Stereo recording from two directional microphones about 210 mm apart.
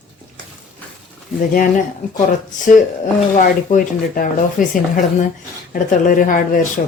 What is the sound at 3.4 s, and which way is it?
Speech, 40° left (ahead or behind).